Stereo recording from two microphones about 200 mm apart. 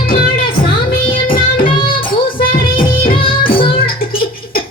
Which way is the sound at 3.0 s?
25° left (ahead or behind).